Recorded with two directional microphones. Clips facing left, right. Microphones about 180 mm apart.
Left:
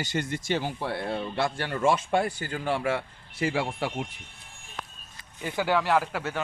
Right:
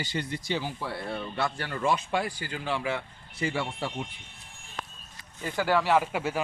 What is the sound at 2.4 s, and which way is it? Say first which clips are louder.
Speech: left 3 dB; 45° left (ahead or behind).